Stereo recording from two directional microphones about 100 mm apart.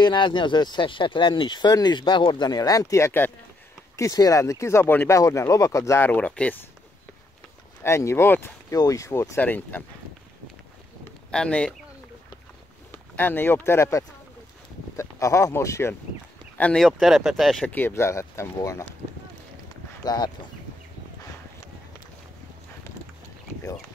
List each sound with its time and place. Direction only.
0.0 s speech: 50° left (ahead or behind); by 3.3 s 25° left (ahead or behind)
3.9 s speech: 35° left (ahead or behind)
6.0 s speech: 15° left (ahead or behind)
7.8 s speech: 25° left (ahead or behind)
8.7 s speech: 35° left (ahead or behind)
9.4 s speech: 20° left (ahead or behind)
11.3 s speech: 10° left (ahead or behind)
12.9 s speech: 20° left (ahead or behind)
16.5 s speech: 15° left (ahead or behind)
16.8 s speech: 5° right (ahead or behind)
17.6 s speech: 20° left (ahead or behind)
20.0 s speech: 40° left (ahead or behind)